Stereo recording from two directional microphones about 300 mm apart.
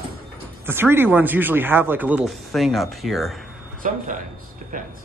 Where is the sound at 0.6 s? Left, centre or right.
Centre.